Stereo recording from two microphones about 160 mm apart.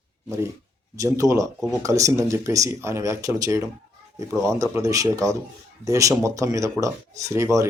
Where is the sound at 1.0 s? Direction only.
20° right (ahead or behind).